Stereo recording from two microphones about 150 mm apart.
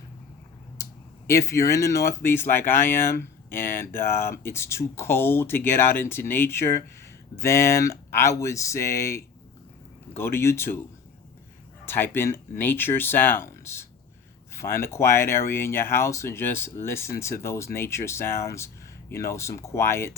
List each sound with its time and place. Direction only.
1.3 s speech: 20° left (ahead or behind)
11.9 s speech: 15° left (ahead or behind)